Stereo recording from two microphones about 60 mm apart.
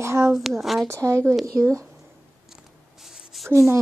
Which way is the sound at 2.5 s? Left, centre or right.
Centre.